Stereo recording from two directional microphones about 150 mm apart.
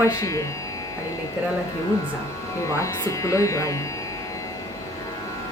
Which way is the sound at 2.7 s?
20° left (ahead or behind).